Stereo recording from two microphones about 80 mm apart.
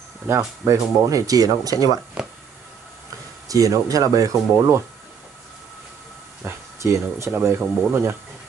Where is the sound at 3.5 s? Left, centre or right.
Right.